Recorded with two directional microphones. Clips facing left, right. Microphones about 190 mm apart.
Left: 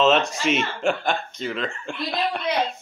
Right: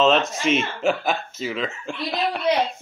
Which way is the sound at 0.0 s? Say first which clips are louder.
Right 1 dB; centre (ahead or behind).